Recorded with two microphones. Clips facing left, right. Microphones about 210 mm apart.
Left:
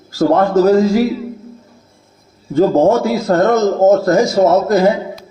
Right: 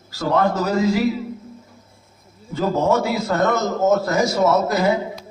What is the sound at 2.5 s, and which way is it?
A man's voice, 50° left (ahead or behind).